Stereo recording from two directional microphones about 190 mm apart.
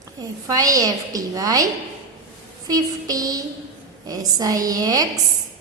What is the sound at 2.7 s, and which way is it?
A woman's voice, 20° right (ahead or behind).